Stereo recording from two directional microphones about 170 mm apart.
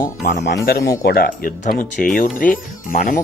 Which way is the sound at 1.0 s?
65° left (ahead or behind).